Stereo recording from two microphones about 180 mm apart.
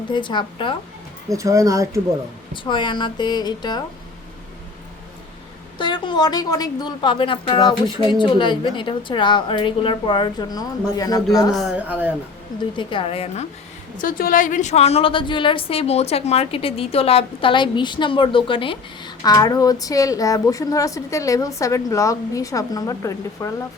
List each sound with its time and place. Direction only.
0.1 s a woman's voice: 25° left (ahead or behind)
1.3 s speech: 15° right (ahead or behind)
2.5 s a woman's voice: 25° left (ahead or behind)
5.7 s a woman's voice: 25° left (ahead or behind)
11.5 s speech: 5° right (ahead or behind)
12.7 s a woman's voice: 25° left (ahead or behind)
13.9 s a woman's voice: 50° left (ahead or behind); by 23.5 s 20° left (ahead or behind)